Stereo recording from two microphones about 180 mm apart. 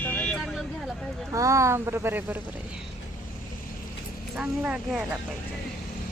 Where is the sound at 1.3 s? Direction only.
15° right (ahead or behind).